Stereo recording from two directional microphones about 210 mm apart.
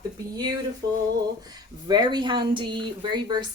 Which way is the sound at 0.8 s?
20° right (ahead or behind).